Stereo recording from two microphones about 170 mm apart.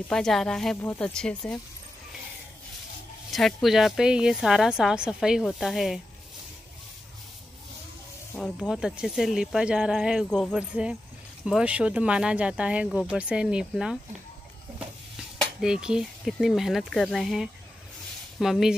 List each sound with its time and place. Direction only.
0.1 s speech: centre (ahead or behind)
3.3 s speech: centre (ahead or behind)
8.4 s speech: centre (ahead or behind)
15.3 s speech: 5° right (ahead or behind)